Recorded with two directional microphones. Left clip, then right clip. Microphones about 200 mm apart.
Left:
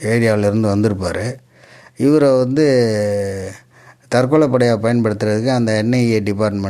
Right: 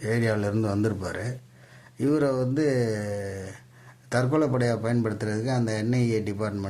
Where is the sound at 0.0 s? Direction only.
40° left (ahead or behind).